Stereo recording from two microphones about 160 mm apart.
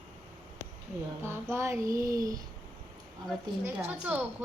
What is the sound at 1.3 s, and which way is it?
Speech, 15° right (ahead or behind).